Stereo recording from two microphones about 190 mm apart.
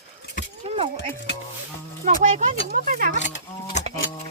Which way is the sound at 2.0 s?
40° right (ahead or behind).